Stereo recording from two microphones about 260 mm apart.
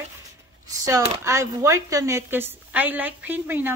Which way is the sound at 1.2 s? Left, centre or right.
Centre.